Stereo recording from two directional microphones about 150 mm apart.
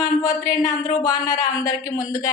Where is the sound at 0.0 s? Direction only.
25° left (ahead or behind).